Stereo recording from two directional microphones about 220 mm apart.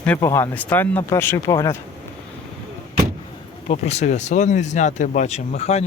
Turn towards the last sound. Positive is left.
turn(degrees=30)  # may be behind; listen again after turning